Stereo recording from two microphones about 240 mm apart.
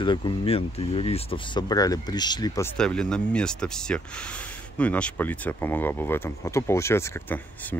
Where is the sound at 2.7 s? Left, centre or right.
Centre.